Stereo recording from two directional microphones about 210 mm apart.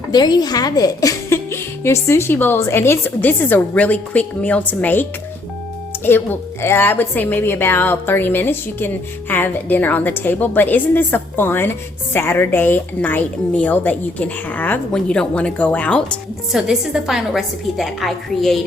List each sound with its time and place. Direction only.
0.1 s a woman's voice: 20° left (ahead or behind)
6.1 s a woman's voice: 10° left (ahead or behind)